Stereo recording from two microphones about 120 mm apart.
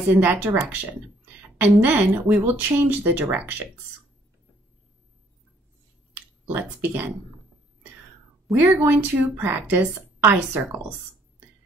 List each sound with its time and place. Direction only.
0.1 s a woman's voice: 15° right (ahead or behind)
6.5 s a woman's voice: 15° right (ahead or behind)
8.5 s a woman's voice: 15° right (ahead or behind)